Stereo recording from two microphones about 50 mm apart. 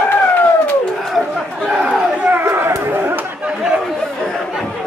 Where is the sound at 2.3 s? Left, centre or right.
Right.